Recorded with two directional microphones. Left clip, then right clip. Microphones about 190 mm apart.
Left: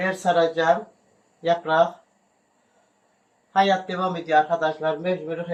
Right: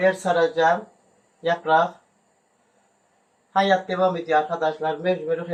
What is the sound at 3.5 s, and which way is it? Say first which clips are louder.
Speech: even; 30° left (ahead or behind).